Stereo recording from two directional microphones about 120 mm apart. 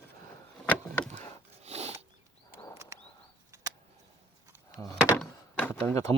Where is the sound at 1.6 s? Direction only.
65° right (ahead or behind).